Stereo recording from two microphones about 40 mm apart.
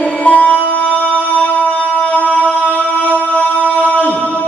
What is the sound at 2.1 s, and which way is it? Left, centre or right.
Music, left.